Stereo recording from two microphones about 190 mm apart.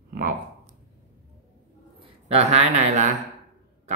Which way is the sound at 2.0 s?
30° right (ahead or behind).